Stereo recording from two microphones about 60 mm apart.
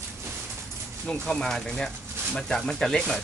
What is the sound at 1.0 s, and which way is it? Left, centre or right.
Speech, centre.